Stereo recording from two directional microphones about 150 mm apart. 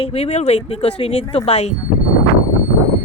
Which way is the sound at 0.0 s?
45° left (ahead or behind).